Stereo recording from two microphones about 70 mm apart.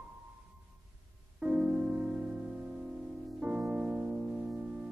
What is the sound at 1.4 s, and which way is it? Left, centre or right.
Music, centre.